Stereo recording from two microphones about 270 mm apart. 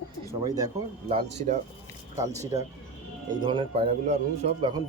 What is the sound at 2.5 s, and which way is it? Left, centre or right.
Speech, centre.